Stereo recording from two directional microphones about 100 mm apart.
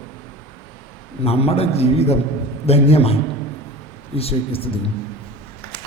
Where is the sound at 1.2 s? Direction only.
90° left.